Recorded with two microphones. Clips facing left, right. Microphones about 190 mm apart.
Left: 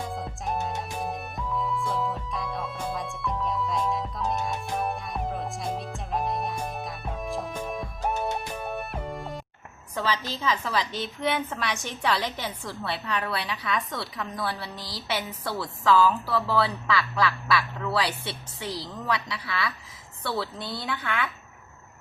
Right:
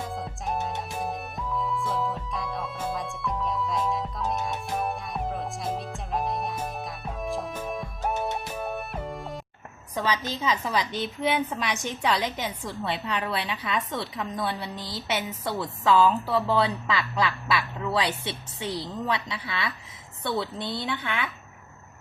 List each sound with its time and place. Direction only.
0.0 s music: centre (ahead or behind)
9.9 s a woman's voice: 15° right (ahead or behind)